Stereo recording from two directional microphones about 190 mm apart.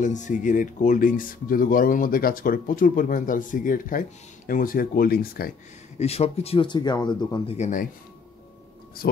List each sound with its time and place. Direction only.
0.0 s speech: 40° left (ahead or behind)
5.9 s speech: 35° left (ahead or behind)
7.5 s speech: 40° left (ahead or behind)
9.0 s speech: 50° left (ahead or behind)